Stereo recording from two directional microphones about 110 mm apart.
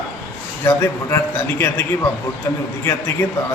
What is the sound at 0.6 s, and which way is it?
A man's voice, 20° left (ahead or behind).